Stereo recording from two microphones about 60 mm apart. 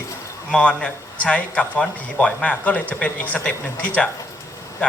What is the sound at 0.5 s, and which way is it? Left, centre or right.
A man's voice, left.